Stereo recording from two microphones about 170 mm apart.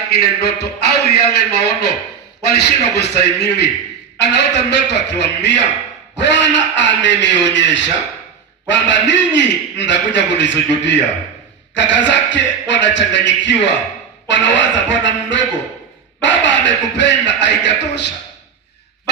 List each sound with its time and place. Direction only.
0.1 s a man's voice: 70° left (ahead or behind); by 18.1 s 90° left